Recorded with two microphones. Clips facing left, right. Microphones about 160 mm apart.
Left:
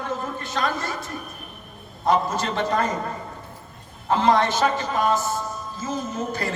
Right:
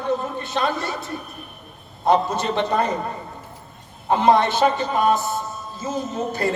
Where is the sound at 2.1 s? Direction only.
20° right (ahead or behind).